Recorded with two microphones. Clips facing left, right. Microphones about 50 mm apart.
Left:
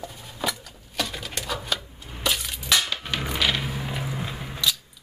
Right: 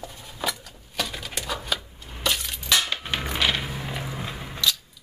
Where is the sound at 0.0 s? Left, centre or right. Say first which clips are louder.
Left 1 dB; centre.